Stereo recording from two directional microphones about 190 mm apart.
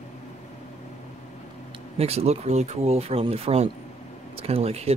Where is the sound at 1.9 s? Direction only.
35° right (ahead or behind).